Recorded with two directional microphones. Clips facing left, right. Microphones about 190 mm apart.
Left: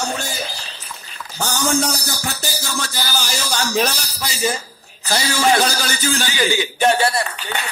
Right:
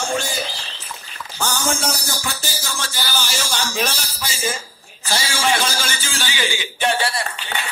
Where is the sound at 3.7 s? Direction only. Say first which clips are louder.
Left 4 dB; 40° left (ahead or behind).